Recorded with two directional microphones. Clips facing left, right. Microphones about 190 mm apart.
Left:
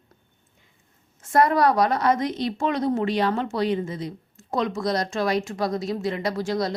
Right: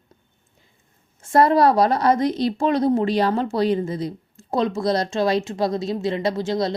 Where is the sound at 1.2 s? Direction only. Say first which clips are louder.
Right 3 dB; 30° right (ahead or behind).